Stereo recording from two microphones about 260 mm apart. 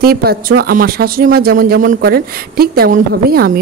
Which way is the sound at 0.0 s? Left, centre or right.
Right.